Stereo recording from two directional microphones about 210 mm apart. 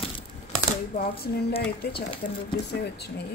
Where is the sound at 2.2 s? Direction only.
55° left (ahead or behind).